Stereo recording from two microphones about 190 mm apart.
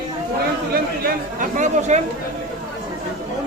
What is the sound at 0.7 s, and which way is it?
Speech, 50° right (ahead or behind).